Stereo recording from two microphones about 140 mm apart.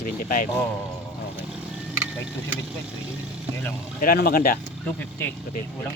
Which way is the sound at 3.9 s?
90° left.